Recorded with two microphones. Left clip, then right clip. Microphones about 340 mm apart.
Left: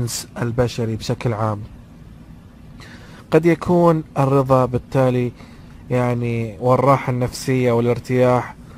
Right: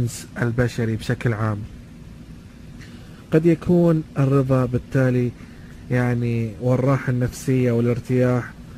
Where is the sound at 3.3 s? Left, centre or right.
Centre.